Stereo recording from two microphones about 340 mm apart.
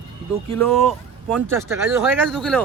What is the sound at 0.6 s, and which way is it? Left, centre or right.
Speech, centre.